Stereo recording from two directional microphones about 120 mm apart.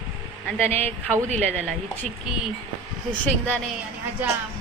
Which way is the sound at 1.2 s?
70° right (ahead or behind).